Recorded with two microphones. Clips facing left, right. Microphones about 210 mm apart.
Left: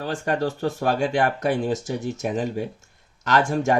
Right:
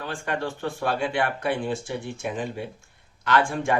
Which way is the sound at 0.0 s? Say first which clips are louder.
Left 5 dB; 40° left (ahead or behind).